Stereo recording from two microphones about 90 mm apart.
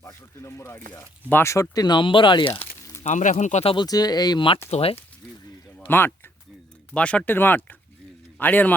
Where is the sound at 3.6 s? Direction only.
90° left.